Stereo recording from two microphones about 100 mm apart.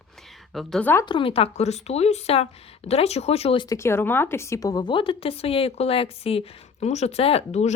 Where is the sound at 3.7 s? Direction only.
25° left (ahead or behind); by 7.6 s 85° left.